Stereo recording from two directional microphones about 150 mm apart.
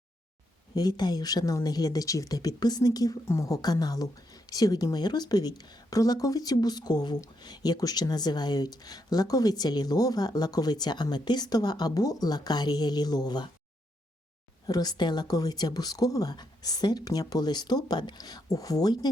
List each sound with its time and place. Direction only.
0.8 s speech: 25° left (ahead or behind)
14.7 s speech: 25° left (ahead or behind)